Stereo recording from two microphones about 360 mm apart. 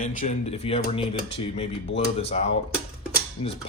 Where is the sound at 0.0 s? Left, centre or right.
Left.